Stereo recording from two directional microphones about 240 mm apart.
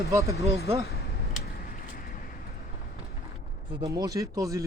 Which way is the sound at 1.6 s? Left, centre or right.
Left.